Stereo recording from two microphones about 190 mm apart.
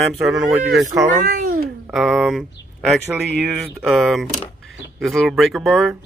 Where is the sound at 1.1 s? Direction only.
40° right (ahead or behind).